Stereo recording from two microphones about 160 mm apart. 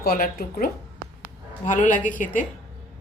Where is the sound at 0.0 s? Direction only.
70° left (ahead or behind); by 2.4 s 55° left (ahead or behind).